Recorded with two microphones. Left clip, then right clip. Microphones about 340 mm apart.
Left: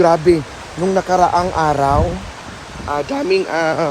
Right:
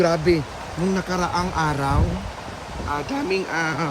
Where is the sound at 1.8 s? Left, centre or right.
Left.